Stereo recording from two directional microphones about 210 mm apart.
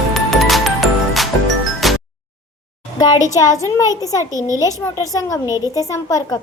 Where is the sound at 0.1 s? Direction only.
Centre (ahead or behind).